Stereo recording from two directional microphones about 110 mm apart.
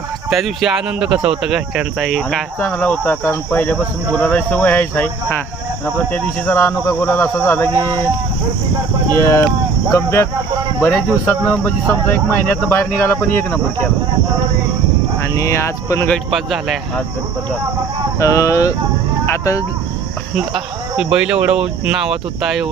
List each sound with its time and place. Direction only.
0.3 s speech: centre (ahead or behind)
2.6 s speech: 20° left (ahead or behind)
9.1 s speech: 25° left (ahead or behind)
15.2 s speech: 25° left (ahead or behind)
16.0 s speech: 5° left (ahead or behind)
18.2 s speech: 30° left (ahead or behind)
20.3 s speech: 5° right (ahead or behind)